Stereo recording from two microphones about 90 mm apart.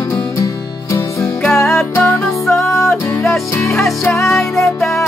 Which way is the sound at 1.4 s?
5° left (ahead or behind).